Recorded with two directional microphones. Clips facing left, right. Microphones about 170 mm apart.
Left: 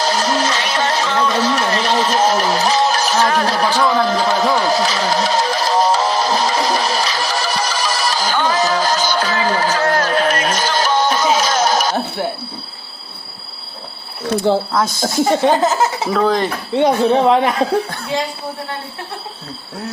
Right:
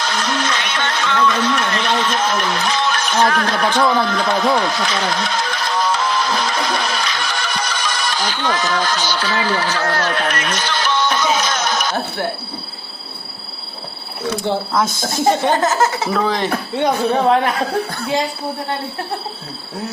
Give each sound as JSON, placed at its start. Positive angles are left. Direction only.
{"t": 0.0, "sound": "a sound", "side_deg": 35}
{"t": 14.5, "sound": "speech", "side_deg": 40}
{"t": 15.4, "sound": "speech", "side_deg": 10}
{"t": 16.1, "sound": "speech", "side_deg": 0}
{"t": 16.7, "sound": "speech", "side_deg": 25}